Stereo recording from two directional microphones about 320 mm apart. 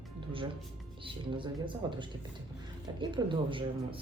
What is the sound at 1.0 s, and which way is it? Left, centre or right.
A woman's voice, centre.